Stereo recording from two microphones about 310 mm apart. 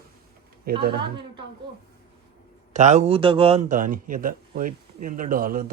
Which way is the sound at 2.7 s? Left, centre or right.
Right.